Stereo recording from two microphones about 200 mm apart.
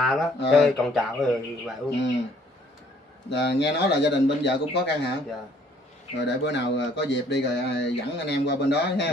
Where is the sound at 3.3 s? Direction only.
60° left (ahead or behind).